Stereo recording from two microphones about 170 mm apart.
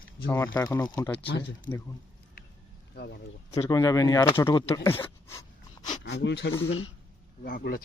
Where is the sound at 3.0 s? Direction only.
75° left (ahead or behind).